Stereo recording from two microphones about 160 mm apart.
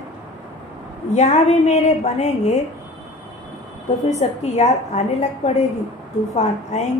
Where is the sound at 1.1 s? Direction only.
45° left (ahead or behind).